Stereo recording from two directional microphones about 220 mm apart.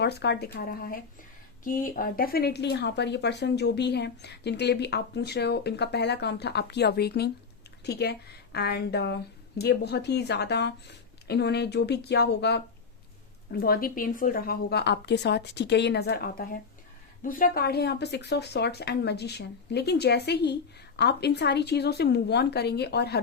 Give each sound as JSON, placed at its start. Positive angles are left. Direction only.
{"t": 0.0, "sound": "speech", "side_deg": 50}